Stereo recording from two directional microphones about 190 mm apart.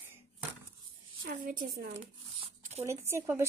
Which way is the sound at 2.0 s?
35° right (ahead or behind).